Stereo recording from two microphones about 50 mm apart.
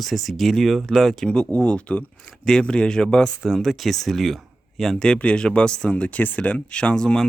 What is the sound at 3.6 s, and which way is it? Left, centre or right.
Speech, centre.